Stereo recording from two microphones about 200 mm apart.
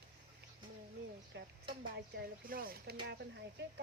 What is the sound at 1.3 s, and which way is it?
Stir, 60° right (ahead or behind).